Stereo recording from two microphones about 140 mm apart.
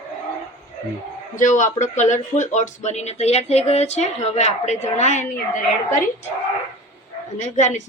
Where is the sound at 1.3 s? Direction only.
60° left (ahead or behind).